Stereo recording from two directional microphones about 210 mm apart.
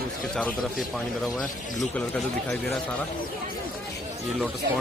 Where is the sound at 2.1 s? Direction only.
Centre (ahead or behind).